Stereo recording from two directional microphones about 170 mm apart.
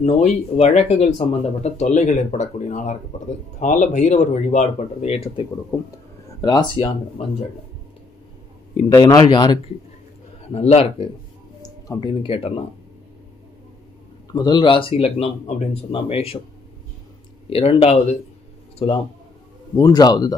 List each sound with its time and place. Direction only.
0.0 s speech: 40° left (ahead or behind)
6.4 s speech: 25° left (ahead or behind)
8.8 s speech: 25° left (ahead or behind)
10.5 s speech: 35° left (ahead or behind)
14.3 s speech: 25° left (ahead or behind)
17.5 s speech: 35° left (ahead or behind)
19.8 s speech: 20° left (ahead or behind)